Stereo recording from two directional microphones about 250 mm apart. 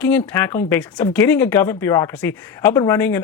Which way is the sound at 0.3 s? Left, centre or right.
Centre.